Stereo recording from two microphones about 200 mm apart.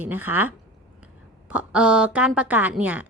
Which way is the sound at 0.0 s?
10° right (ahead or behind).